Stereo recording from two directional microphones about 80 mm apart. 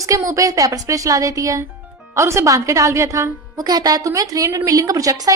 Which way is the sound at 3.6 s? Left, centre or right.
Right.